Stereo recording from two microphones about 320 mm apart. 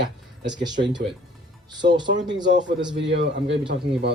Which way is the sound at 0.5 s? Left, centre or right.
Centre.